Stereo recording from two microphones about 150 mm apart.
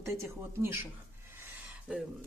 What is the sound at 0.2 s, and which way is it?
Speech, 15° right (ahead or behind).